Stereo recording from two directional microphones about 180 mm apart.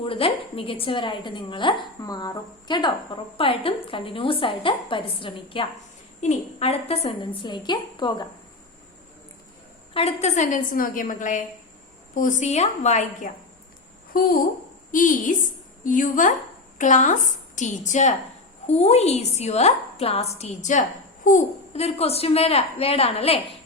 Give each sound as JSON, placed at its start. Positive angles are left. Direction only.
{"t": 0.0, "sound": "a woman's voice", "side_deg": 30}
{"t": 9.9, "sound": "a woman's voice", "side_deg": 35}
{"t": 14.1, "sound": "a woman's voice", "side_deg": 55}